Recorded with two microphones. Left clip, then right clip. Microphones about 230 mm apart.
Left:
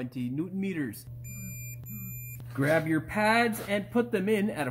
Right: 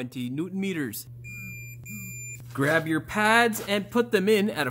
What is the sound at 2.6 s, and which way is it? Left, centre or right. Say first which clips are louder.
Speech: right 2 dB; right.